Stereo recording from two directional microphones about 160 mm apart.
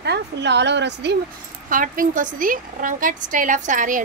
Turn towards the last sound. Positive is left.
turn(degrees=-55)  # may be behind; listen again after turning